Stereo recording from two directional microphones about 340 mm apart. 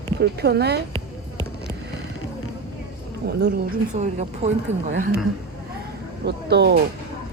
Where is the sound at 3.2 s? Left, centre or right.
Right.